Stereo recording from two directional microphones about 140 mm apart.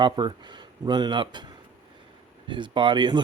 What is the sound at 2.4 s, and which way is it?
Speech, 35° right (ahead or behind).